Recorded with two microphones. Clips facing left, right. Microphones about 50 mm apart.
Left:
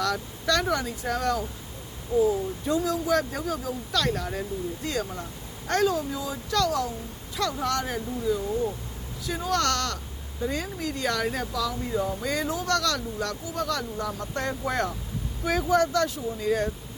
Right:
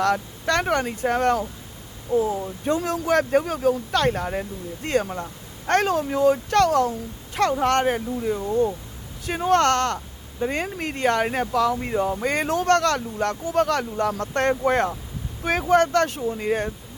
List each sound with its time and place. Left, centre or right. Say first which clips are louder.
0.0 s speech: right 5 dB; right
2.1 s speech: even; right